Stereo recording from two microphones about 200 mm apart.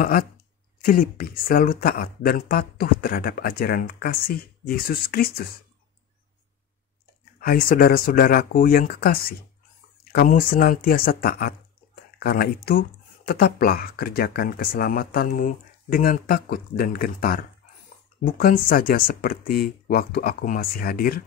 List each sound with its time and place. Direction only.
0.0 s speech: 45° left (ahead or behind)
7.3 s speech: 45° left (ahead or behind)